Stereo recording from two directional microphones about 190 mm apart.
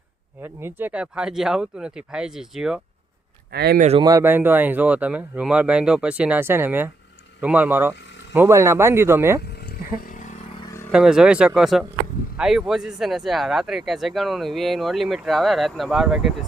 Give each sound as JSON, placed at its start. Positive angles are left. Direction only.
{"t": 0.4, "sound": "speech", "side_deg": -10}
{"t": 3.5, "sound": "speech", "side_deg": -60}
{"t": 3.8, "sound": "speech", "side_deg": -35}
{"t": 4.0, "sound": "speech", "side_deg": -15}
{"t": 10.9, "sound": "speech", "side_deg": -5}